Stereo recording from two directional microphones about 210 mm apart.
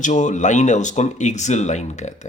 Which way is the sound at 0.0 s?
35° left (ahead or behind).